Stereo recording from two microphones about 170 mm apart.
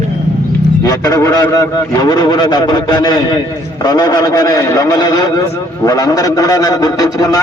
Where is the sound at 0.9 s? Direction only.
20° left (ahead or behind).